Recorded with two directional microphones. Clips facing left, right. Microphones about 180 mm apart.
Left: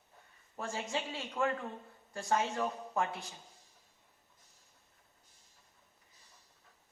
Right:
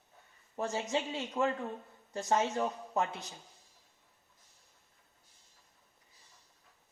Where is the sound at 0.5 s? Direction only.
20° right (ahead or behind).